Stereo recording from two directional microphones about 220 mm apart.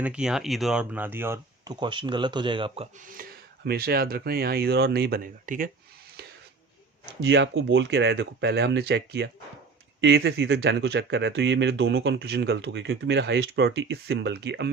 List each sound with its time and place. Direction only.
0.0 s speech: 5° right (ahead or behind); by 2.8 s 20° right (ahead or behind)
3.1 s speech: 40° right (ahead or behind)
7.2 s speech: 55° right (ahead or behind)